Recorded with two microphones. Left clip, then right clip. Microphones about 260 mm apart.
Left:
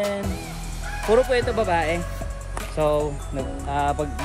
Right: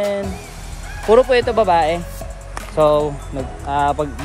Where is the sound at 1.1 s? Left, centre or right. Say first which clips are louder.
Right 7 dB; centre.